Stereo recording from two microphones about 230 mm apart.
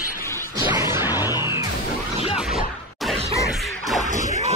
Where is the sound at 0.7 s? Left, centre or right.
Centre.